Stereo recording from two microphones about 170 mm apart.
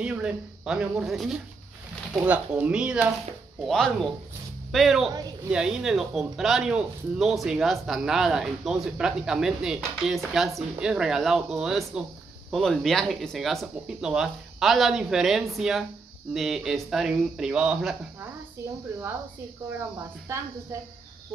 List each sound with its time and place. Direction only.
0.0 s speech: 5° right (ahead or behind)
20.3 s speech: 15° right (ahead or behind)